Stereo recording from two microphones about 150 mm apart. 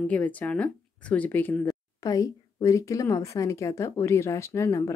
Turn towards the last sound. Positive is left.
turn(degrees=20)  # may be behind; listen again after turning